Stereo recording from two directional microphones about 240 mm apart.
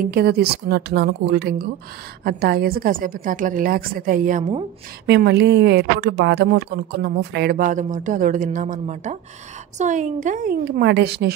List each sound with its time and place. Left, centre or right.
0.0 s speech: right
5.0 s speech: right